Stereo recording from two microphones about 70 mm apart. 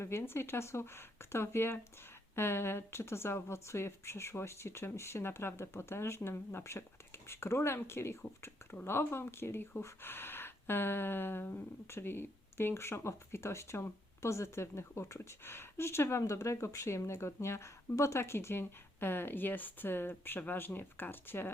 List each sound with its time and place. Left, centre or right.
0.0 s speech: left